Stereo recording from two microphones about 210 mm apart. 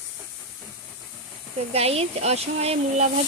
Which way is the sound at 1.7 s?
30° right (ahead or behind).